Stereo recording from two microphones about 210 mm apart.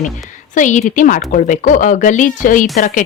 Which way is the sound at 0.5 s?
35° left (ahead or behind).